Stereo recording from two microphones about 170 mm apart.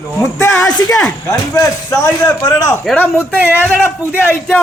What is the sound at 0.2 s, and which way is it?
A man's voice, 20° left (ahead or behind).